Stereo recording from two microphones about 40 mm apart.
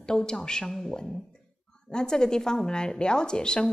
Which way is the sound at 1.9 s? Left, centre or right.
Centre.